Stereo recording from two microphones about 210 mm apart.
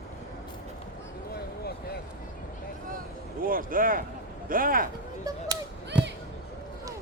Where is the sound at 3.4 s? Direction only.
40° right (ahead or behind).